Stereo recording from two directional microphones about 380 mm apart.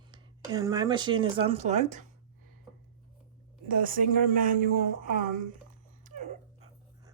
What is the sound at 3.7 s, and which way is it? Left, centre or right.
Speech, right.